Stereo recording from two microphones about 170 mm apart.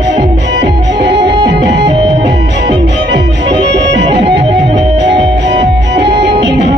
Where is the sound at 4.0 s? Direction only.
85° right.